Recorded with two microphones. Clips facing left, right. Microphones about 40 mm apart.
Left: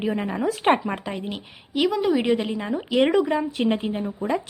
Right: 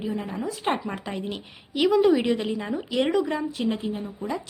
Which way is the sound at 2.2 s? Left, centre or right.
Centre.